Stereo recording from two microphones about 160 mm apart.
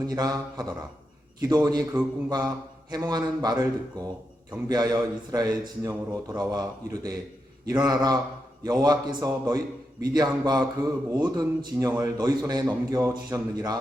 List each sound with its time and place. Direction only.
0.0 s a man's voice: 25° right (ahead or behind)
4.7 s a man's voice: 25° right (ahead or behind)